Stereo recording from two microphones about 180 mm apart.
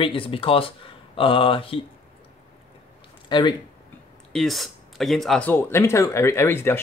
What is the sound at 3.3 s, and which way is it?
Speech, 25° left (ahead or behind).